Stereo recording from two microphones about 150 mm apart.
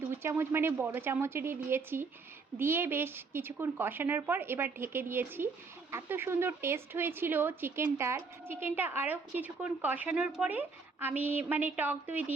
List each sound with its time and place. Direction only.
0.2 s speech: 15° right (ahead or behind)